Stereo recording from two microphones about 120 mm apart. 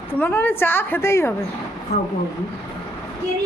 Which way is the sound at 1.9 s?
65° left (ahead or behind).